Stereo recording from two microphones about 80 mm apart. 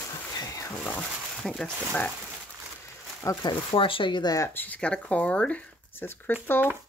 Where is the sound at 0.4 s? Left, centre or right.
Left.